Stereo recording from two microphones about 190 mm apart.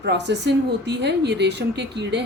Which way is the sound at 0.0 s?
65° right (ahead or behind).